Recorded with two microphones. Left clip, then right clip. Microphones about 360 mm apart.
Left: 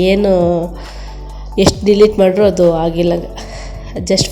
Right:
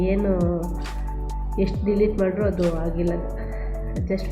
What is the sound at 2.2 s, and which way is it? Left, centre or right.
Speech, left.